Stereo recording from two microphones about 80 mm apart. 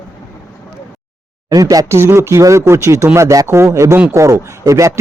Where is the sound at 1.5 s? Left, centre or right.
Right.